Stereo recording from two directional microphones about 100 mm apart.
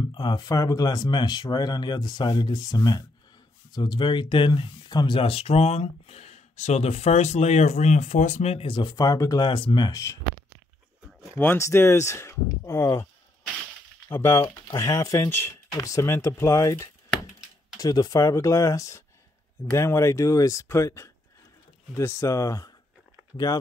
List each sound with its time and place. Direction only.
0.0 s speech: 50° left (ahead or behind); by 8.7 s 80° left
8.7 s speech: 45° left (ahead or behind)
9.4 s speech: 50° left (ahead or behind)
11.3 s speech: 25° left (ahead or behind)
17.7 s speech: 40° left (ahead or behind)